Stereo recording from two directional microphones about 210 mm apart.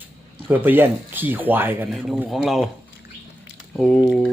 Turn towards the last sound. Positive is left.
turn(degrees=0)  # may be behind; listen again after turning